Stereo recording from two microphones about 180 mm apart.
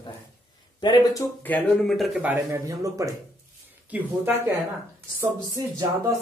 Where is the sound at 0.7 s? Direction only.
25° left (ahead or behind).